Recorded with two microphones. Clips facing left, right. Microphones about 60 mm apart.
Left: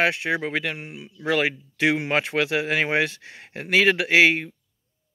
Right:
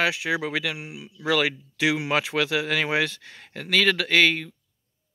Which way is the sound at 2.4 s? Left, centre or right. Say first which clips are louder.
Left 1 dB; centre.